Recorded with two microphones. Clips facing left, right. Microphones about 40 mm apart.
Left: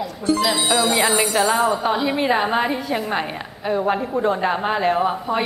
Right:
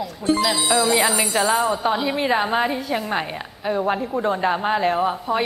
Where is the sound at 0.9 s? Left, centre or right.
Left.